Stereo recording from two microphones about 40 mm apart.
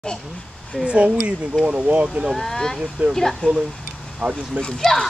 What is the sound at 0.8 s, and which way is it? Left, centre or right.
Speech, right.